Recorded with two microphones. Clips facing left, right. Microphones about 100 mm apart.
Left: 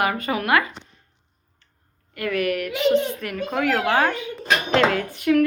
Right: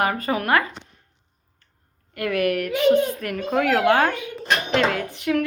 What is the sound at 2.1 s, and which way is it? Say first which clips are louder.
A child's voice: right 1 dB; 50° right (ahead or behind).